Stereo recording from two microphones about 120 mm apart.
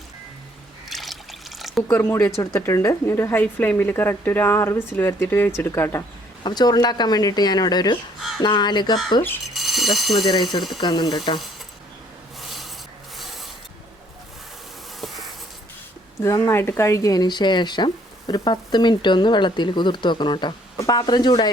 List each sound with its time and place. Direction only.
0.9 s trickle: centre (ahead or behind)
1.9 s speech: 20° left (ahead or behind)
6.4 s speech: 35° left (ahead or behind)
9.6 s a sound: centre (ahead or behind)
10.2 s speech: 35° left (ahead or behind)
12.4 s a sound: centre (ahead or behind)
13.1 s filing: centre (ahead or behind)
15.0 s a sound: centre (ahead or behind)
16.2 s speech: 20° left (ahead or behind); by 20.5 s 40° left (ahead or behind)
20.7 s speech: 30° left (ahead or behind)